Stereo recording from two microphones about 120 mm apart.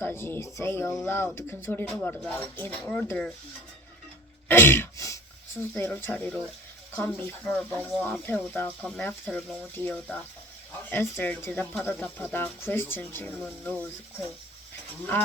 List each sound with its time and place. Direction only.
0.0 s speech: 20° left (ahead or behind)
1.9 s speech: 10° left (ahead or behind)
4.4 s throat clearing: 20° left (ahead or behind)
6.9 s speech: 15° left (ahead or behind)